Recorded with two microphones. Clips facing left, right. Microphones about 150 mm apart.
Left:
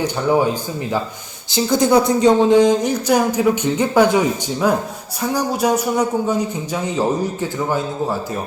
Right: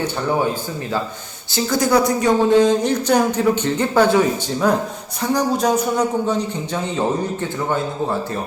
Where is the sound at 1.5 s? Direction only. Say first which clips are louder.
Left 3 dB; 20° left (ahead or behind).